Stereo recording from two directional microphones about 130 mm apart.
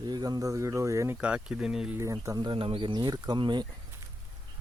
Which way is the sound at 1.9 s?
25° right (ahead or behind).